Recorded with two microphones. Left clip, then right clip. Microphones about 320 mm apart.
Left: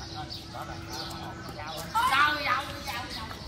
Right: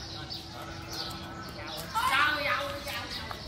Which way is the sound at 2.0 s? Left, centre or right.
Centre.